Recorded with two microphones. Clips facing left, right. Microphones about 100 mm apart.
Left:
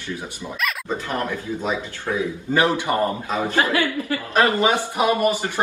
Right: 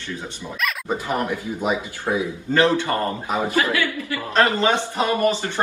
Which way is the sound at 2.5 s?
15° left (ahead or behind).